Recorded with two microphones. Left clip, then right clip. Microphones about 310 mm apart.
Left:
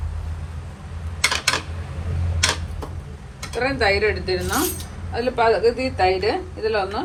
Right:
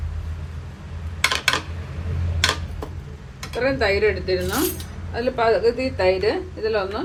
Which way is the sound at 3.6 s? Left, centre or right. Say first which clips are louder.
Even; left.